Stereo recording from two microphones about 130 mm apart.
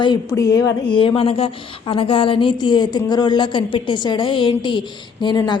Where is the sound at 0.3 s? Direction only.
25° left (ahead or behind).